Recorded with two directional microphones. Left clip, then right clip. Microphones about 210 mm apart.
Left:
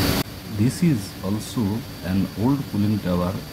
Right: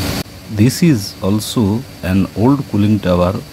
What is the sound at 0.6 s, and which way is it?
Speech, 40° right (ahead or behind).